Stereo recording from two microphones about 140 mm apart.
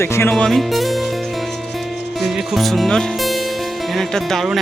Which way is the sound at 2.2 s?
Centre (ahead or behind).